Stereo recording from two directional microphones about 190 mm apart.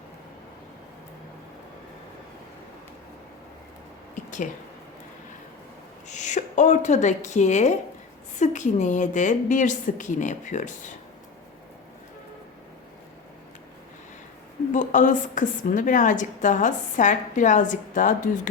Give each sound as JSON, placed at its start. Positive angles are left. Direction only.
{"t": 4.1, "sound": "a sound", "side_deg": 40}
{"t": 6.1, "sound": "a woman's voice", "side_deg": 40}
{"t": 14.7, "sound": "a woman's voice", "side_deg": 40}